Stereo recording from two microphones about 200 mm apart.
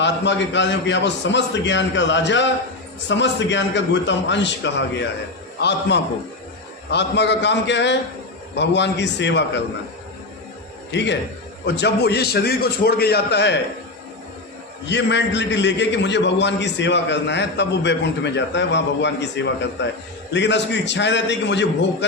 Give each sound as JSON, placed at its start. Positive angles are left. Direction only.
{"t": 0.0, "sound": "a man's voice", "side_deg": 65}
{"t": 10.9, "sound": "a man's voice", "side_deg": 60}
{"t": 14.8, "sound": "a man's voice", "side_deg": 60}